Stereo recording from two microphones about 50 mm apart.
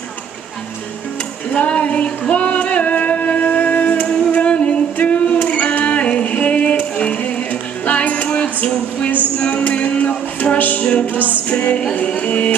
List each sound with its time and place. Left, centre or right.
1.5 s music: left
4.9 s a sound: left
5.5 s music: left
9.4 s music: left